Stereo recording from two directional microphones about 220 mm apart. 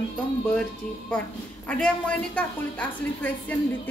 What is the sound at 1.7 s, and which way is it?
A woman's voice, 5° left (ahead or behind).